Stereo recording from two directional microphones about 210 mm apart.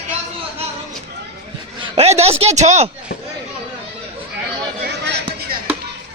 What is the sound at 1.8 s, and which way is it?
A man's voice, 30° right (ahead or behind).